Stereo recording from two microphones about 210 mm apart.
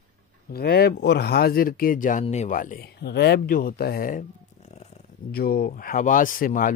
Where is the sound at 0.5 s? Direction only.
50° left (ahead or behind); by 4.9 s 30° left (ahead or behind).